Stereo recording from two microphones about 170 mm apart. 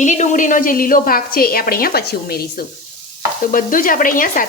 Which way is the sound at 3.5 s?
55° left (ahead or behind).